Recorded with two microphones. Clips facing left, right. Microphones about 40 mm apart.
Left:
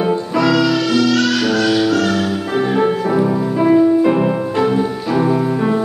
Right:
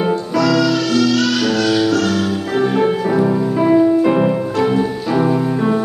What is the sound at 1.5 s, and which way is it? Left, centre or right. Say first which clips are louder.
Music: even; centre.